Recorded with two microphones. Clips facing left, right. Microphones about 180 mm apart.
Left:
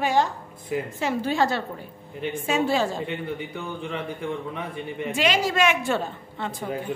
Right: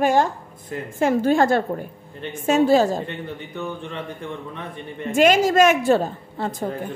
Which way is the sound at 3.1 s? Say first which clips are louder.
Left 2 dB; 10° left (ahead or behind).